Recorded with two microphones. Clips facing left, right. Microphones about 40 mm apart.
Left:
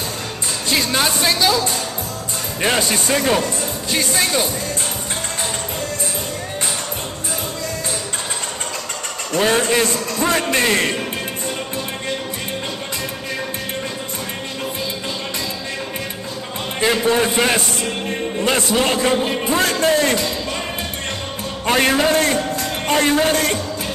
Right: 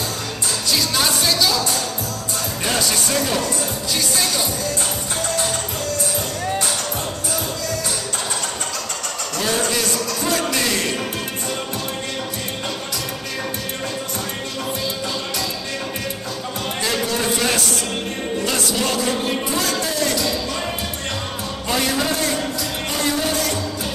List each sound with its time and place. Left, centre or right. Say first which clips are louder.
0.7 s music: left 2 dB; left
2.6 s a man's voice: left 4 dB; left
9.3 s a man's voice: left 6 dB; left
16.8 s a man's voice: left 6 dB; left
21.6 s music: left 6 dB; left